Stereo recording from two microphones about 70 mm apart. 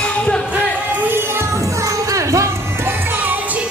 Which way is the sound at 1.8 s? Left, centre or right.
Right.